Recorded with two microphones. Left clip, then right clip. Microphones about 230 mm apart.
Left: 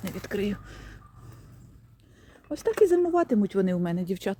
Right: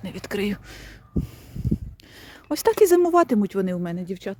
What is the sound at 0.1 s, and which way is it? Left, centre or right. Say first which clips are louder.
Speech: right 4 dB; centre.